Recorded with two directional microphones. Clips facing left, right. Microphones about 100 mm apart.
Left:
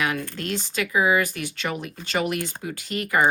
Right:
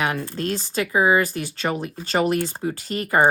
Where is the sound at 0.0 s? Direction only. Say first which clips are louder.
Right 3 dB; 30° right (ahead or behind).